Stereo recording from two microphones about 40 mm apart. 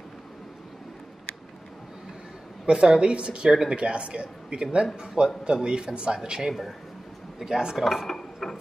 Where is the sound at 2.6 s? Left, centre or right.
Right.